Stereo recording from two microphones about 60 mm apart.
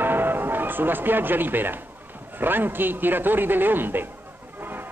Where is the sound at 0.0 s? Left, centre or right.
Right.